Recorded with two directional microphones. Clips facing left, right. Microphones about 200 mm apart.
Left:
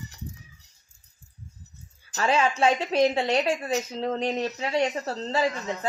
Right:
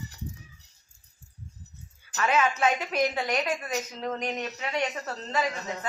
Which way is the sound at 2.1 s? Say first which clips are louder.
Left 2 dB; 30° left (ahead or behind).